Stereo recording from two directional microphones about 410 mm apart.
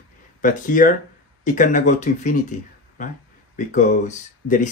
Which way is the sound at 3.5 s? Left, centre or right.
Centre.